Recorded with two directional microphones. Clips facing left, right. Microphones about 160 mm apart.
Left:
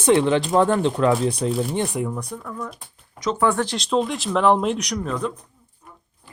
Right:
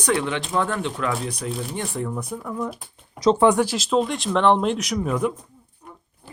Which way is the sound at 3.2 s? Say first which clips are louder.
Right 7 dB; 30° right (ahead or behind).